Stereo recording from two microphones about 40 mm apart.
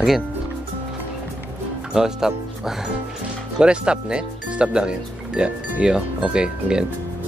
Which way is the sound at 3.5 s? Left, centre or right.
Right.